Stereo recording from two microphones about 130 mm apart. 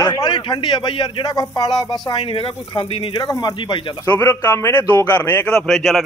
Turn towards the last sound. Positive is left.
turn(degrees=0)  # may be behind; listen again after turning